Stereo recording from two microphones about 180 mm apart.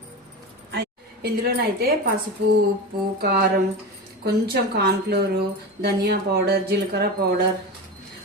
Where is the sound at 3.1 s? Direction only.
60° right (ahead or behind).